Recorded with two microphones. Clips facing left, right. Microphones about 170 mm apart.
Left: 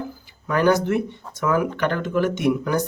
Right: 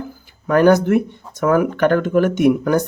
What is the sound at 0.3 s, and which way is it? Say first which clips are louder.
Speech: right 6 dB; 50° right (ahead or behind).